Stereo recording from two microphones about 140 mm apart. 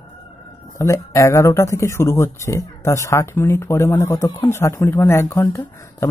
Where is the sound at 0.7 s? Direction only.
20° left (ahead or behind).